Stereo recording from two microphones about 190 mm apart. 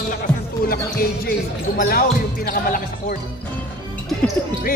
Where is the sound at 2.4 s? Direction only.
50° left (ahead or behind).